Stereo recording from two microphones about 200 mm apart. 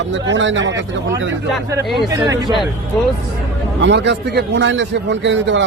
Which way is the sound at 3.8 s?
60° right (ahead or behind).